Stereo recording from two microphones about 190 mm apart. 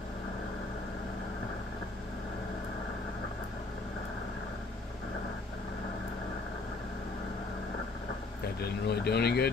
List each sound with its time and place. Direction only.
8.8 s speech: 60° left (ahead or behind)